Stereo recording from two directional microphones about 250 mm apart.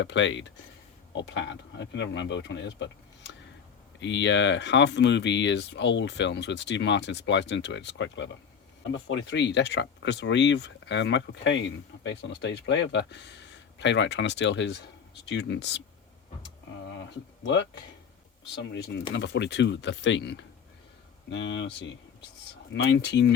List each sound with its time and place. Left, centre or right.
0.0 s speech: left
4.0 s speech: left
16.8 s a sound: left
18.5 s speech: left